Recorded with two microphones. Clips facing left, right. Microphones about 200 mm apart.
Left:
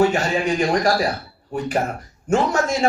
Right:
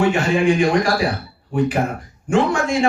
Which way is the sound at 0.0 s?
40° left (ahead or behind).